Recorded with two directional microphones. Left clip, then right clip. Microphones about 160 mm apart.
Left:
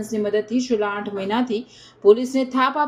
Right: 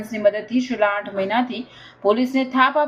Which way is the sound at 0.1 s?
40° left (ahead or behind).